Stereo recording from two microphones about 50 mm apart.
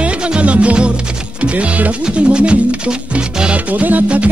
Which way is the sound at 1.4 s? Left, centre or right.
Right.